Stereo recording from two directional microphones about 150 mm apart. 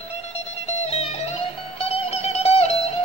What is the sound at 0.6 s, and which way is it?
Music, 45° left (ahead or behind).